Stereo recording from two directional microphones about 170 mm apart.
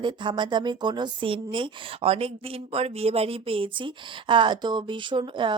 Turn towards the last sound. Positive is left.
turn(degrees=-30)  # may be behind; listen again after turning